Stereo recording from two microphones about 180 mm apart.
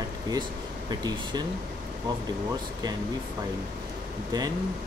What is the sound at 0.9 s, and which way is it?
Speech, 20° right (ahead or behind).